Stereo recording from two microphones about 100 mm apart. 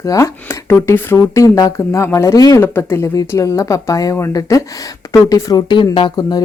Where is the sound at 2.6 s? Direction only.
25° left (ahead or behind).